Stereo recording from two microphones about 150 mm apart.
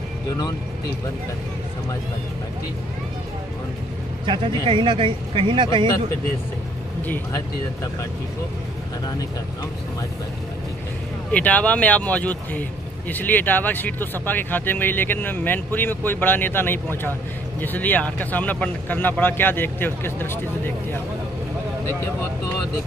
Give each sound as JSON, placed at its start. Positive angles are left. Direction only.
{"t": 4.3, "sound": "speech", "side_deg": -35}
{"t": 11.3, "sound": "speech", "side_deg": 10}